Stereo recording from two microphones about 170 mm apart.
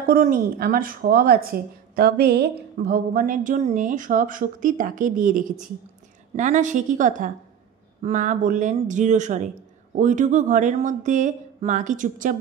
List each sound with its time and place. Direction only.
0.0 s speech: 55° right (ahead or behind)